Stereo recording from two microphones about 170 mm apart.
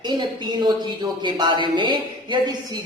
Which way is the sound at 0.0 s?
25° right (ahead or behind).